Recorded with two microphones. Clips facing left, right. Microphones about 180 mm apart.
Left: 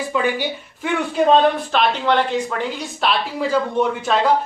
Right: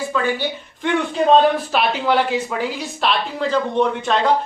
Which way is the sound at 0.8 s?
Centre (ahead or behind).